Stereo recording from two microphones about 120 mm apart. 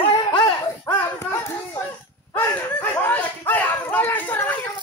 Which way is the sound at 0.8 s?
20° left (ahead or behind).